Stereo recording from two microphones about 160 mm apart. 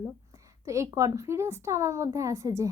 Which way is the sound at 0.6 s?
20° right (ahead or behind).